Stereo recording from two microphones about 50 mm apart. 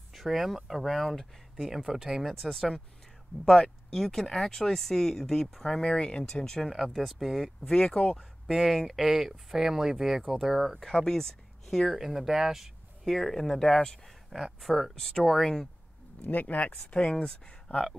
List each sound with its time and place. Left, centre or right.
0.1 s speech: centre
2.4 s speech: centre
3.9 s speech: centre
6.6 s speech: centre
8.2 s speech: centre
10.9 s speech: centre
14.0 s speech: centre
15.0 s speech: centre
16.3 s speech: left
16.9 s speech: centre